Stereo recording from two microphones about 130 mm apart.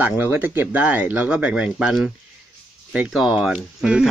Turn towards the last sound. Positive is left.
turn(degrees=-5)  # may be behind; listen again after turning